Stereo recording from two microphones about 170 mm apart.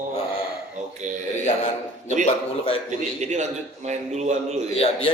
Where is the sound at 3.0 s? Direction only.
45° right (ahead or behind).